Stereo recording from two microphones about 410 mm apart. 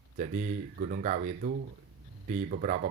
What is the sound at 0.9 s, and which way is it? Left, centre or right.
Speech, centre.